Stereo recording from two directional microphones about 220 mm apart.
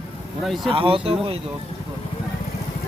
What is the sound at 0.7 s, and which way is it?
Speech, 25° right (ahead or behind).